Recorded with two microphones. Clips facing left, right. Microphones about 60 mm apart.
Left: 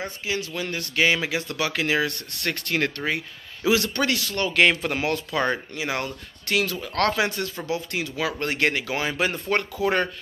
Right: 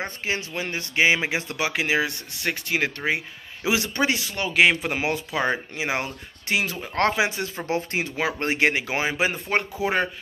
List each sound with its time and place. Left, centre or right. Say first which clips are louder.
0.0 s speech: right 1 dB; right
7.6 s speech: right 4 dB; right; by 10.0 s centre